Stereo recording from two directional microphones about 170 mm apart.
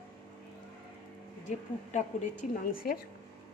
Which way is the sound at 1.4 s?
45° left (ahead or behind).